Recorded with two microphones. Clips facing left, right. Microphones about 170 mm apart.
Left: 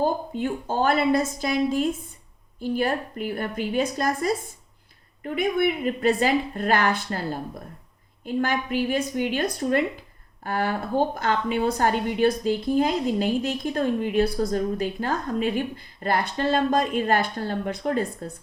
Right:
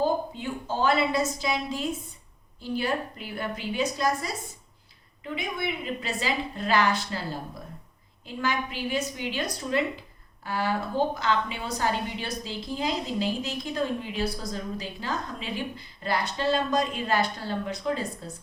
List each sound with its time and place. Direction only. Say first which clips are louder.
0.0 s a woman's voice: left 2 dB; 50° left (ahead or behind)